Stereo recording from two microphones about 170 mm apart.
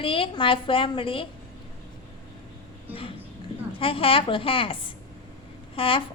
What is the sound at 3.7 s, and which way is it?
A woman's voice, 35° left (ahead or behind).